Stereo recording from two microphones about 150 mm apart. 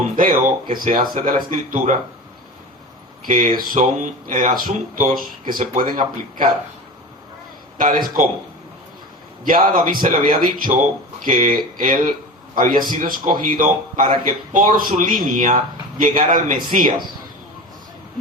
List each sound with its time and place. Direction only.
0.2 s speech: 65° right (ahead or behind)
3.2 s speech: 65° right (ahead or behind)
7.8 s speech: 65° right (ahead or behind)
9.4 s speech: 65° right (ahead or behind)